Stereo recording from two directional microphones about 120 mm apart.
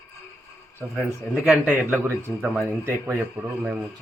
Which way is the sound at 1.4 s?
10° right (ahead or behind).